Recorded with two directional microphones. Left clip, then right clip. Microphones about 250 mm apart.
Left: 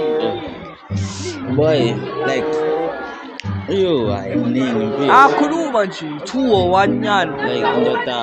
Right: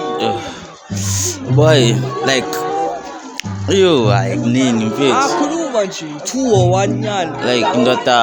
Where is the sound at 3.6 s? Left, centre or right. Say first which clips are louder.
Right 5 dB; right.